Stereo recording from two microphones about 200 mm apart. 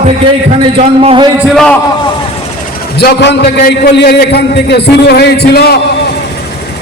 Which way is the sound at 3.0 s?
55° left (ahead or behind).